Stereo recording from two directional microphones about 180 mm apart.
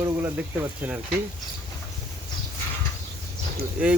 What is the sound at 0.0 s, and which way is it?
Speech, 10° right (ahead or behind).